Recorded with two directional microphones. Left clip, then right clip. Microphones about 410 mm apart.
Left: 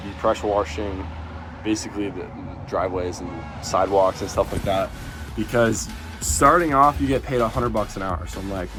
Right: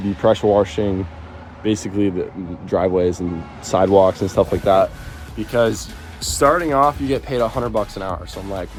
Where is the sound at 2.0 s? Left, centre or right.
Right.